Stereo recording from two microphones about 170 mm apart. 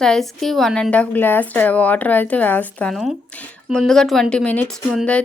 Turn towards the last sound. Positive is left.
turn(degrees=0)  # may be behind; listen again after turning